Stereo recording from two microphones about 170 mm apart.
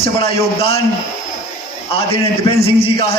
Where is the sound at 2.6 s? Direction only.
35° left (ahead or behind).